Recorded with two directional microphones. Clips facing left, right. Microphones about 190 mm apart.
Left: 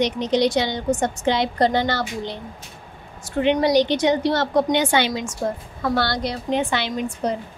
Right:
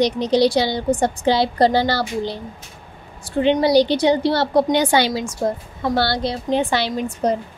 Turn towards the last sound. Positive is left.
turn(degrees=-35)  # may be behind; listen again after turning